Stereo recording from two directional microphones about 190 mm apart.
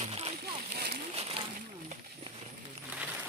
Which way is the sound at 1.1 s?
30° right (ahead or behind).